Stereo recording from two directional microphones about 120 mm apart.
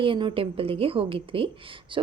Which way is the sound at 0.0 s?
45° right (ahead or behind).